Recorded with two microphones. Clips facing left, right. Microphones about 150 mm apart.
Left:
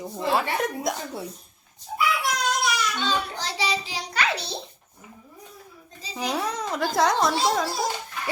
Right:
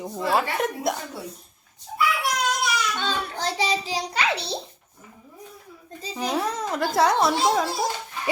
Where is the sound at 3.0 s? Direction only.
50° right (ahead or behind).